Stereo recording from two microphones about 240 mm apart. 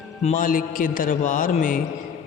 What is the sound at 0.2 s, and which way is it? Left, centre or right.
A man's voice, left.